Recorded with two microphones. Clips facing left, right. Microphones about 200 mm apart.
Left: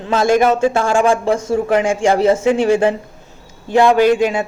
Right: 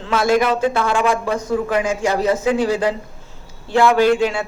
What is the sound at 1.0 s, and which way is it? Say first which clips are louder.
A woman's voice: left 4 dB; 30° left (ahead or behind).